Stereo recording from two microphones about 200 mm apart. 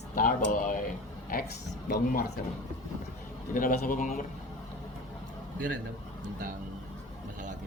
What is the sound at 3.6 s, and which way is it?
Speech, 40° left (ahead or behind).